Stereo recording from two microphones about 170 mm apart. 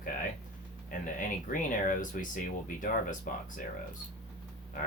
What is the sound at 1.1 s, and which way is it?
Speech, 50° left (ahead or behind).